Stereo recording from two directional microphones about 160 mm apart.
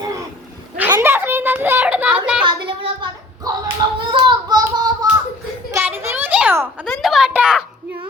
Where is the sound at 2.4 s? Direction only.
30° right (ahead or behind).